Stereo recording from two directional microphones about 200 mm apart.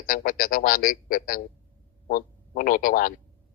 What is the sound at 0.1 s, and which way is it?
A man's voice, 45° left (ahead or behind).